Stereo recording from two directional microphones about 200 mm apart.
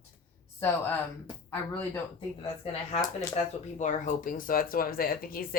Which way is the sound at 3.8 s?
40° left (ahead or behind).